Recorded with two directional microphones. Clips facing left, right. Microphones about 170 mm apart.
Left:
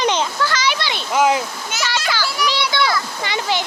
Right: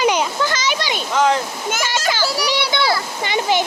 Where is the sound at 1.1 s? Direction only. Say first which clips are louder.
Left 1 dB; 10° left (ahead or behind).